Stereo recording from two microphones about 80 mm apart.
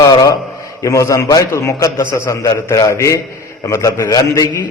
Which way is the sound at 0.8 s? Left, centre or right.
Left.